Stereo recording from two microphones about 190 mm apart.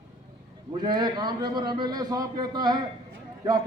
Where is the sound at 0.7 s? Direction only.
25° right (ahead or behind).